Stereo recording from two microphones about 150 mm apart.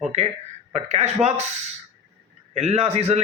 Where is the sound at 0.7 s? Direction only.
45° right (ahead or behind).